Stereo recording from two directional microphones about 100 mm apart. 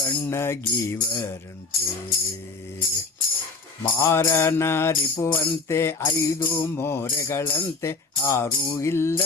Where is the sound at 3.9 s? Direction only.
25° left (ahead or behind).